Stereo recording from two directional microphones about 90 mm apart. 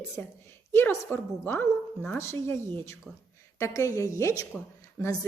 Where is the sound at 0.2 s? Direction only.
20° left (ahead or behind).